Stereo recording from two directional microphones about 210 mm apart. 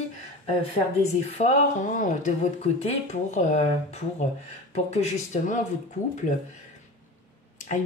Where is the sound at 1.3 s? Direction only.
35° left (ahead or behind).